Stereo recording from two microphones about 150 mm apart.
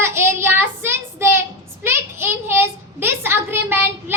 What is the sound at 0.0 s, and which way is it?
Child singing, 15° right (ahead or behind).